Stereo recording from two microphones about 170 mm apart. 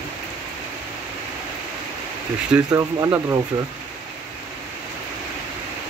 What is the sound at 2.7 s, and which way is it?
Speech, 15° right (ahead or behind).